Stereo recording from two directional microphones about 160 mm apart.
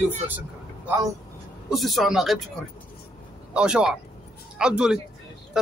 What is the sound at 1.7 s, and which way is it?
Speech, centre (ahead or behind).